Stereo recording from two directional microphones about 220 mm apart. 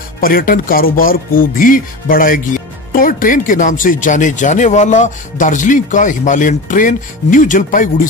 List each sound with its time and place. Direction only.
0.2 s speech: 40° left (ahead or behind)